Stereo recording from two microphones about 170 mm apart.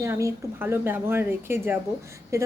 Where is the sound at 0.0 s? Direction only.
15° right (ahead or behind).